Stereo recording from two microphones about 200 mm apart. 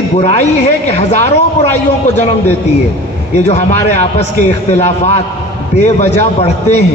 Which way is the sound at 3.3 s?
35° left (ahead or behind).